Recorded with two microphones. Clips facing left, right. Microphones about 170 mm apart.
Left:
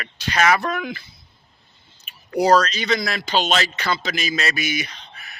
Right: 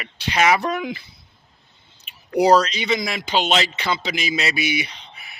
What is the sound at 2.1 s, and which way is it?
Speech, 15° right (ahead or behind).